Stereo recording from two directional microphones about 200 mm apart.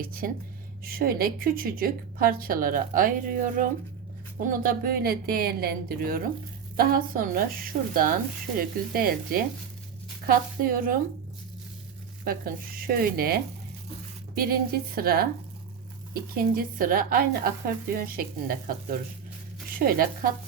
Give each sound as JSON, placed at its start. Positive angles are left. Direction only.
{"t": 0.0, "sound": "a woman's voice", "side_deg": -45}
{"t": 12.2, "sound": "a woman's voice", "side_deg": -45}
{"t": 16.3, "sound": "a woman's voice", "side_deg": -45}
{"t": 19.8, "sound": "a woman's voice", "side_deg": -45}